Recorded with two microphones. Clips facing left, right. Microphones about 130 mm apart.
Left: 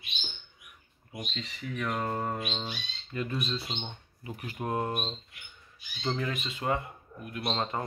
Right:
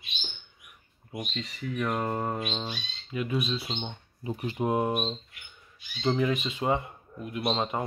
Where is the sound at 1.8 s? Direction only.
15° right (ahead or behind).